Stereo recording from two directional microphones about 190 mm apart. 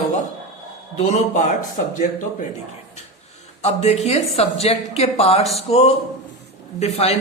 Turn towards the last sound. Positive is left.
turn(degrees=35)  # may be behind; listen again after turning